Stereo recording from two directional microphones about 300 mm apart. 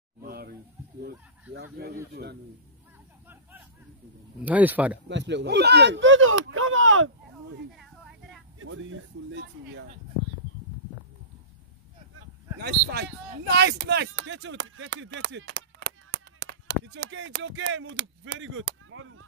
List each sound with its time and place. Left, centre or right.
0.2 s a sound: right
1.5 s speech: right
4.5 s speech: centre
5.0 s speech: right
8.5 s a sound: right
12.5 s speech: right